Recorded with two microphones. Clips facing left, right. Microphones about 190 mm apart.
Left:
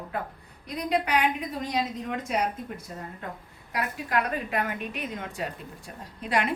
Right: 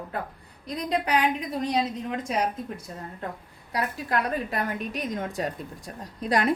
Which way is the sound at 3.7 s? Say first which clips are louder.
Right 1 dB; 35° right (ahead or behind).